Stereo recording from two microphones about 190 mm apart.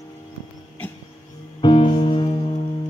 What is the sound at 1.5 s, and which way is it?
Music, 25° left (ahead or behind).